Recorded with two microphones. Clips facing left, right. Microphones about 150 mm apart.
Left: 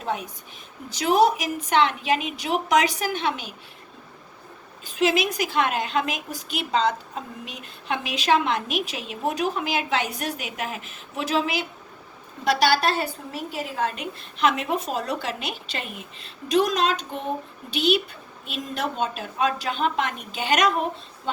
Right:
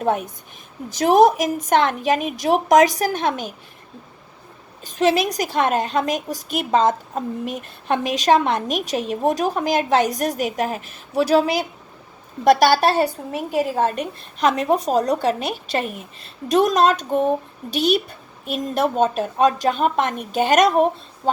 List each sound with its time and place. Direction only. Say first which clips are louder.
0.0 s a woman's voice: right 8 dB; 55° right (ahead or behind)
4.9 s a woman's voice: right 4 dB; 40° right (ahead or behind)